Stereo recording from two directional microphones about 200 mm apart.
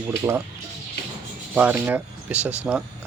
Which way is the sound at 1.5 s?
10° right (ahead or behind).